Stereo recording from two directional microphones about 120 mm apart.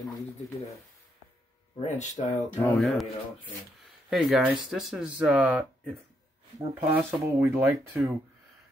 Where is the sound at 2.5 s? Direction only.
15° left (ahead or behind).